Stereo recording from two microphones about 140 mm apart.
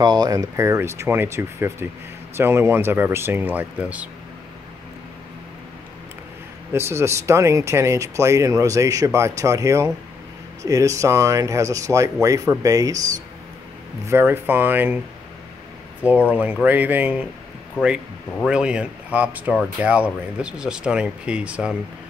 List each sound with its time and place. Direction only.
0.0 s speech: 30° right (ahead or behind); by 4.1 s 10° right (ahead or behind)
6.7 s speech: 20° right (ahead or behind)
14.0 s speech: 15° right (ahead or behind)
16.0 s speech: 10° right (ahead or behind)